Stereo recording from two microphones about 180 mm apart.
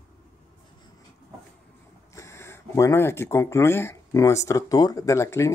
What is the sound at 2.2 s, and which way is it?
Speech, 15° left (ahead or behind).